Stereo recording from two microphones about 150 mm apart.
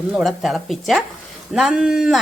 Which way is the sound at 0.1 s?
Centre (ahead or behind).